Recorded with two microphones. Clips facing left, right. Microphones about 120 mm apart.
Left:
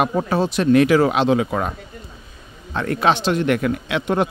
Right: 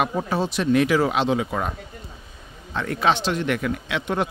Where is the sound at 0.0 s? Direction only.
55° left (ahead or behind).